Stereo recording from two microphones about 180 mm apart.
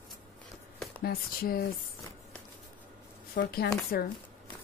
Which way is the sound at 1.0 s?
55° left (ahead or behind).